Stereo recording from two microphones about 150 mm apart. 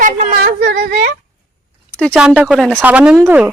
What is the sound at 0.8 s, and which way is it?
Speech, 60° right (ahead or behind).